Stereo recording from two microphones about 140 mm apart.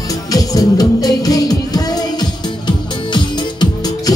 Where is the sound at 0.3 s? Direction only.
25° left (ahead or behind).